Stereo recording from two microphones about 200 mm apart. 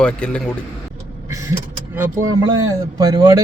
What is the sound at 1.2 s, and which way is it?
Vehicle, 15° right (ahead or behind).